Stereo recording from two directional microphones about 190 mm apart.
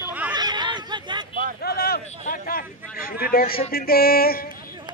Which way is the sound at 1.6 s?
55° left (ahead or behind).